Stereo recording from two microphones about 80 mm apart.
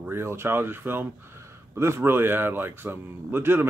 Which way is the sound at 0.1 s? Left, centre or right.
Right.